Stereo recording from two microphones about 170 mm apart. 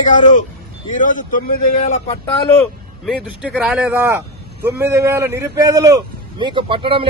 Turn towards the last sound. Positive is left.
turn(degrees=-30)  # may be behind; listen again after turning